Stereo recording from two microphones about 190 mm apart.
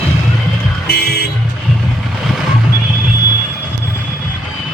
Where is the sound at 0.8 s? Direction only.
55° left (ahead or behind).